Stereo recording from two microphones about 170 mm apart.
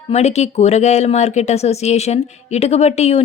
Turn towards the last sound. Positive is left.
turn(degrees=40)  # may be behind; listen again after turning